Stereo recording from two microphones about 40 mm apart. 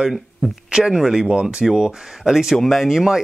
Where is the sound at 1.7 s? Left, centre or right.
Centre.